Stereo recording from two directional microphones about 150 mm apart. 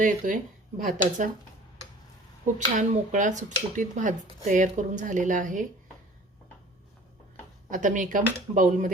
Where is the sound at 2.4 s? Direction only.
55° right (ahead or behind).